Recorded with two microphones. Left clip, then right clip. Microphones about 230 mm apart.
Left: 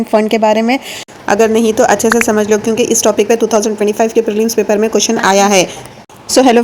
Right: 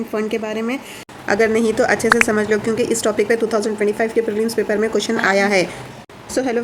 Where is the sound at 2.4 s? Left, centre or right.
Centre.